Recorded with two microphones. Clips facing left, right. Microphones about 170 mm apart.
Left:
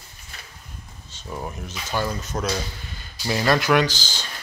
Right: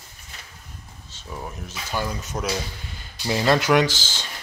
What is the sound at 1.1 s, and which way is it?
Speech, centre (ahead or behind).